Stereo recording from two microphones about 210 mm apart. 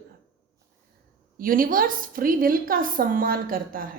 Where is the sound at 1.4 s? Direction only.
40° right (ahead or behind).